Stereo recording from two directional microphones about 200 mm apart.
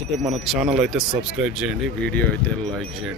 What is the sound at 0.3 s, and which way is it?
Speech, centre (ahead or behind).